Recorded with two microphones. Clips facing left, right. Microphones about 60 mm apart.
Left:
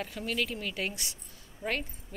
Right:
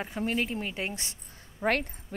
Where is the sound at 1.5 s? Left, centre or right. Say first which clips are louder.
Right 6 dB; right.